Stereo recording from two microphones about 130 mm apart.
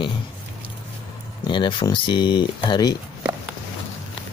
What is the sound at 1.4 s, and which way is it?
Speech, 40° left (ahead or behind).